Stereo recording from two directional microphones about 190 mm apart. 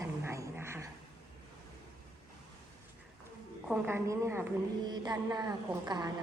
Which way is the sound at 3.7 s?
10° right (ahead or behind).